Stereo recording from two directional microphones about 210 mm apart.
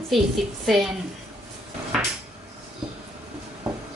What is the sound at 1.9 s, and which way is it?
Cupboard open or close, centre (ahead or behind).